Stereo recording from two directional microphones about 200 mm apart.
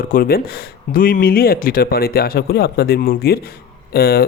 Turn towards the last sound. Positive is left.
turn(degrees=50)  # may be behind; listen again after turning